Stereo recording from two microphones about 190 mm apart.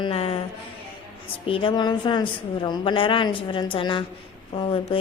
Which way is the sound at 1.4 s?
25° left (ahead or behind).